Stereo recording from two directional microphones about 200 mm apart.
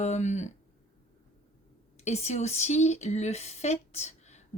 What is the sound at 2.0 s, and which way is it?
Speech, 35° left (ahead or behind).